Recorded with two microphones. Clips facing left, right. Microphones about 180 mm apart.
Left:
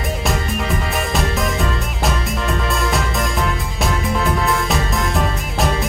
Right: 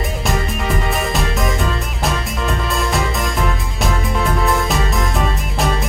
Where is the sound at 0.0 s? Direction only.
Centre (ahead or behind).